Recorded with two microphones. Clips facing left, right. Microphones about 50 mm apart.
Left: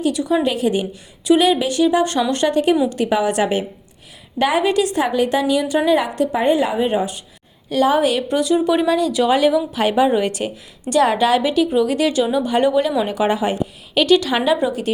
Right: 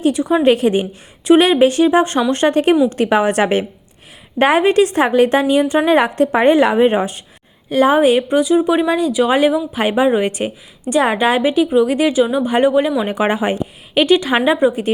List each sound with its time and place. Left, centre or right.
0.0 s speech: right
0.4 s a woman's voice: right
7.7 s speech: right
8.4 s speech: centre
13.1 s speech: right